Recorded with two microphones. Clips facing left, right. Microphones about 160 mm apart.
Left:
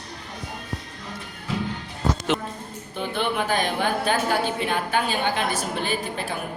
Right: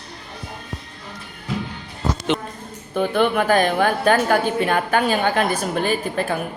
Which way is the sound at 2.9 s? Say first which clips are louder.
Right 7 dB; 50° right (ahead or behind).